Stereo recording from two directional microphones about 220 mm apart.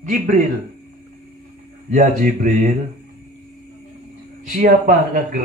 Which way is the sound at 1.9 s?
35° right (ahead or behind).